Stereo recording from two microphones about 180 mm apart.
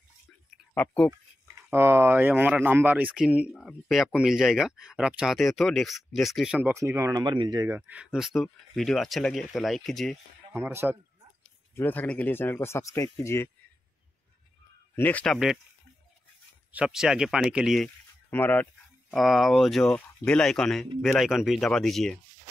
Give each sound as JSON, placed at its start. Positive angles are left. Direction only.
{"t": 0.7, "sound": "speech", "side_deg": 5}
{"t": 1.7, "sound": "speech", "side_deg": -15}
{"t": 10.5, "sound": "speech", "side_deg": -15}
{"t": 11.7, "sound": "speech", "side_deg": 10}
{"t": 15.0, "sound": "speech", "side_deg": 10}
{"t": 16.7, "sound": "speech", "side_deg": -5}
{"t": 18.3, "sound": "speech", "side_deg": 10}